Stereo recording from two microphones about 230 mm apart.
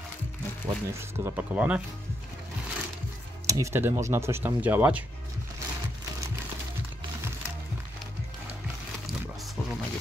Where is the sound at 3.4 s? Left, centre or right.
Centre.